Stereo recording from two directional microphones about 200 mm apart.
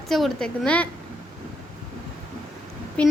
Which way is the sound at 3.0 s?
5° left (ahead or behind).